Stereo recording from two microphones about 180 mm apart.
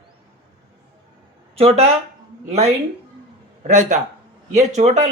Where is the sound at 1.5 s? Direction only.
35° right (ahead or behind).